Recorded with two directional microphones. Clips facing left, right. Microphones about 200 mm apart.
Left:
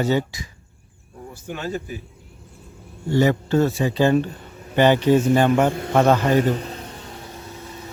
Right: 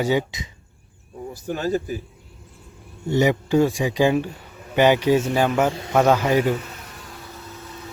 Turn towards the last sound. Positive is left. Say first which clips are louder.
# left 4 dB
turn(degrees=25)  # may be behind; listen again after turning